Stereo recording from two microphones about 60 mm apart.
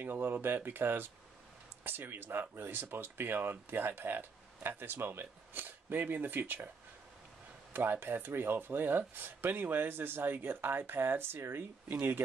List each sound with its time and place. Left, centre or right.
0.0 s speech: right
7.7 s speech: right